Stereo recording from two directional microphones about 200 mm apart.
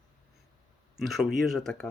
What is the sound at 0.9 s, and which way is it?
Speech, centre (ahead or behind).